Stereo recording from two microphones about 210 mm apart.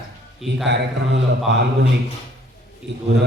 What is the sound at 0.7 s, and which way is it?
Speech, 55° right (ahead or behind).